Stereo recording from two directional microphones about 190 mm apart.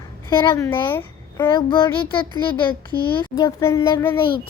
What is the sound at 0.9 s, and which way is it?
Babbling, 10° left (ahead or behind).